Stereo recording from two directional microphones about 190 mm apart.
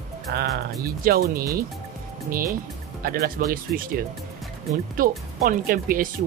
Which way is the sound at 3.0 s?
50° right (ahead or behind).